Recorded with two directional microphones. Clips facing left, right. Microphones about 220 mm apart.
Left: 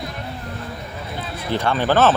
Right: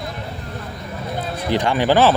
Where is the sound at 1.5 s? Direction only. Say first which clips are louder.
Right 2 dB; 15° right (ahead or behind).